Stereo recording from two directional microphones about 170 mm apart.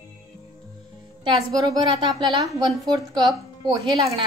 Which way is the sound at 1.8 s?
25° right (ahead or behind).